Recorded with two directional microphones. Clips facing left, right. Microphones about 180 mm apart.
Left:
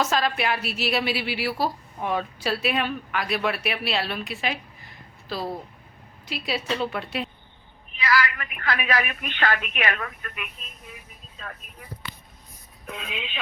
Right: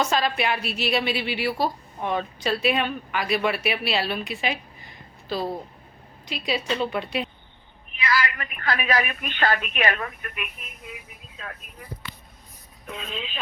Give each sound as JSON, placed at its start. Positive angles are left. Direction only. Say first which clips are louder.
{"t": 0.0, "sound": "a woman's voice", "louder": "right 1 dB", "side_deg": 0}
{"t": 8.1, "sound": "a woman's voice", "louder": "left 2 dB", "side_deg": -25}
{"t": 10.2, "sound": "speech", "louder": "right 2 dB", "side_deg": -20}
{"t": 11.3, "sound": "speech", "louder": "right 1 dB", "side_deg": -5}
{"t": 12.9, "sound": "a woman's voice", "louder": "right 1 dB", "side_deg": 0}